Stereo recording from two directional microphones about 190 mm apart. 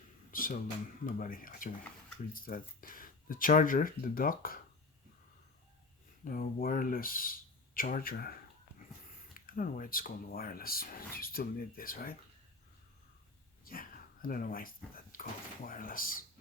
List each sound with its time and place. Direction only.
0.3 s a sound: 45° left (ahead or behind)
1.0 s speech: 45° left (ahead or behind)
6.2 s speech: 45° left (ahead or behind)
13.7 s speech: 50° left (ahead or behind)